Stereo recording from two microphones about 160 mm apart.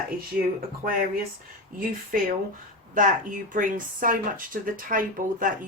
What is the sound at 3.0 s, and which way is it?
Speech, 55° right (ahead or behind).